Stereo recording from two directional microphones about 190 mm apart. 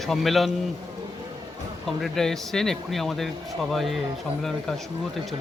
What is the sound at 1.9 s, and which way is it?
Speech, centre (ahead or behind).